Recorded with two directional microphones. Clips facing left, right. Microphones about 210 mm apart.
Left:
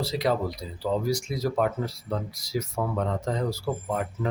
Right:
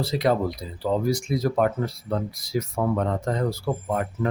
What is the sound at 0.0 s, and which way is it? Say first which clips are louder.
Speech: right 3 dB; 55° right (ahead or behind).